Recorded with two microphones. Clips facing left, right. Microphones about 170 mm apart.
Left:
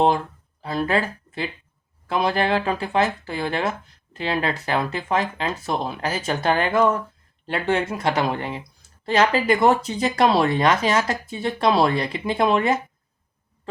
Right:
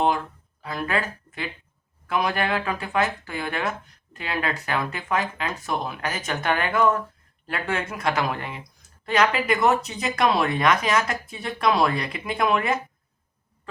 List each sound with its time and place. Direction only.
0.6 s speech: 30° left (ahead or behind)